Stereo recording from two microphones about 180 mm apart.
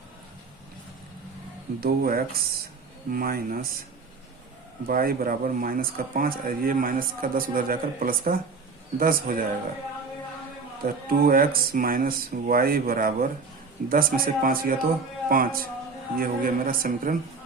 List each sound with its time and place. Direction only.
1.8 s speech: 55° right (ahead or behind)
4.9 s speech: 55° right (ahead or behind)
10.8 s speech: 55° right (ahead or behind)